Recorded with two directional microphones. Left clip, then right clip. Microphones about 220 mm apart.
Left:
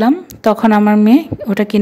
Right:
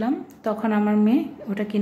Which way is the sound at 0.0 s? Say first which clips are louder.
Left 13 dB; 45° left (ahead or behind).